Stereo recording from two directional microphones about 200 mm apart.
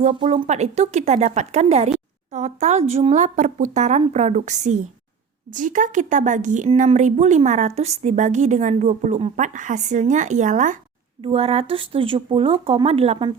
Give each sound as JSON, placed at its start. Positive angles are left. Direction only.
{"t": 0.0, "sound": "a woman's voice", "side_deg": -30}